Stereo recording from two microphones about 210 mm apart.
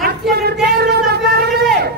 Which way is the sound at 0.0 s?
50° right (ahead or behind).